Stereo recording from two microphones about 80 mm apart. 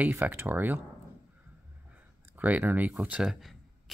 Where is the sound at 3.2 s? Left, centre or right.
Centre.